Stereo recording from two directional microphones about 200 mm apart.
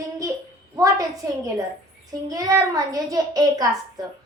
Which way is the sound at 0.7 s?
15° right (ahead or behind).